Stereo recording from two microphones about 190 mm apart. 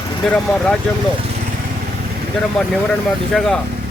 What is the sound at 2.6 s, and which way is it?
A man's voice, centre (ahead or behind).